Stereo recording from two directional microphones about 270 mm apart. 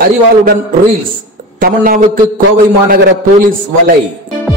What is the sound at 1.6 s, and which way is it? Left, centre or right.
A man's voice, right.